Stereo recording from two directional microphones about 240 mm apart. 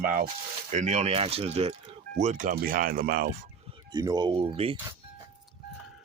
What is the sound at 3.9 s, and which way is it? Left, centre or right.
Speech, centre.